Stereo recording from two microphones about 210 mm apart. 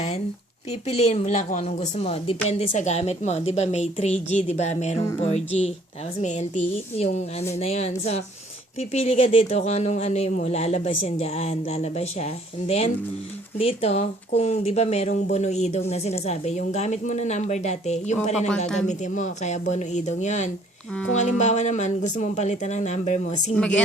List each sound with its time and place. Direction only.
0.9 s speech: 30° left (ahead or behind)
23.6 s a woman's voice: 5° left (ahead or behind)